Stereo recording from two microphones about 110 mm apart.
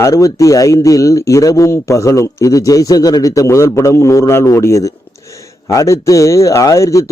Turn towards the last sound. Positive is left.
turn(degrees=30)  # may be behind; listen again after turning